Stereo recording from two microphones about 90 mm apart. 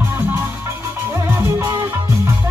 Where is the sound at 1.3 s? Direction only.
30° right (ahead or behind).